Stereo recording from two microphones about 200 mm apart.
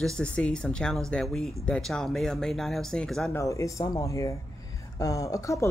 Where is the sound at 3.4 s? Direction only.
15° left (ahead or behind).